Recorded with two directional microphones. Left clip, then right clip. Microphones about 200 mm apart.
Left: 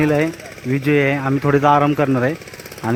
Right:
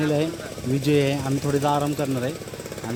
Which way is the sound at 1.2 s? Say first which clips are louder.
Left 8 dB; 15° left (ahead or behind).